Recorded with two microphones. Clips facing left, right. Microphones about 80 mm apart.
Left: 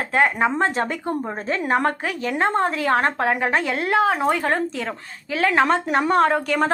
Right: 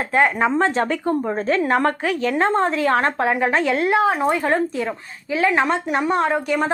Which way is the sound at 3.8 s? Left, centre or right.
Right.